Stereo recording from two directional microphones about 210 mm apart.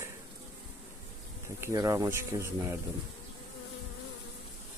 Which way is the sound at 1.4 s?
15° right (ahead or behind).